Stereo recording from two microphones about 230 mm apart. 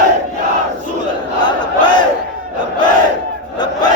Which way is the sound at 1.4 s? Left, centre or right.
Centre.